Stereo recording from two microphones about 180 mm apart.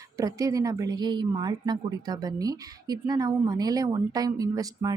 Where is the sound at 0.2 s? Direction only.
20° right (ahead or behind).